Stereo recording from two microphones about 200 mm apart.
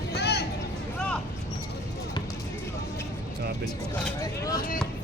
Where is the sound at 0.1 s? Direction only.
55° left (ahead or behind).